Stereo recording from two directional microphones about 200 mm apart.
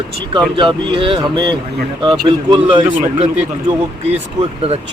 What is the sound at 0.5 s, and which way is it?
Speech, 25° right (ahead or behind).